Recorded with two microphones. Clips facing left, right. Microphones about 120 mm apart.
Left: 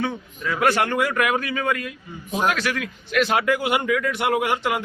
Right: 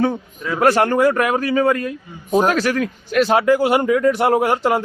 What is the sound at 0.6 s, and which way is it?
A man's voice, 40° right (ahead or behind).